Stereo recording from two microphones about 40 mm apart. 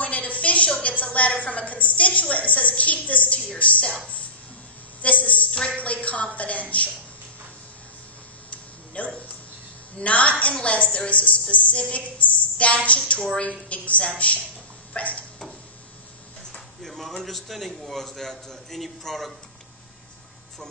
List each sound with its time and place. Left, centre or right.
0.0 s a sound: left
1.1 s a woman's voice: left
5.0 s a woman's voice: left
8.9 s a sound: left
9.9 s a woman's voice: left
16.5 s a man's voice: centre